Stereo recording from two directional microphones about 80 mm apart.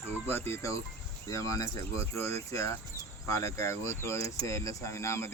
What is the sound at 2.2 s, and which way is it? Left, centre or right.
Speech, left.